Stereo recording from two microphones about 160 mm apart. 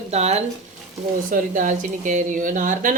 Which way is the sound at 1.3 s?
55° right (ahead or behind).